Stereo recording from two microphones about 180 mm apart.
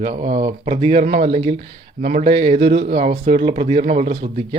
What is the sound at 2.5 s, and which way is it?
Speech, 30° right (ahead or behind).